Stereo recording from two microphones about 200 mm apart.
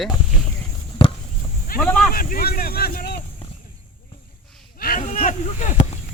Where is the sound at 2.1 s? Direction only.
45° left (ahead or behind).